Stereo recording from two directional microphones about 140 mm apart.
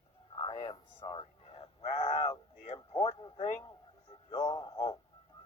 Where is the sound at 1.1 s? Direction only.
45° left (ahead or behind).